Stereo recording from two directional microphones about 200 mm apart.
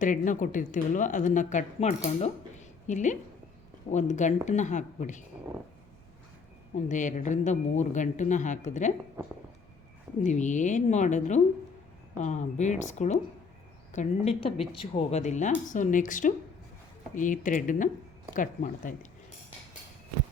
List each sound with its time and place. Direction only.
0.0 s speech: 40° left (ahead or behind)
2.2 s a sound: 35° left (ahead or behind)
3.9 s speech: 35° left (ahead or behind)
6.7 s speech: 40° left (ahead or behind)
10.2 s speech: 35° left (ahead or behind)